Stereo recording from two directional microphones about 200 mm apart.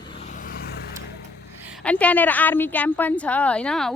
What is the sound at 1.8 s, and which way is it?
Speech, 5° left (ahead or behind).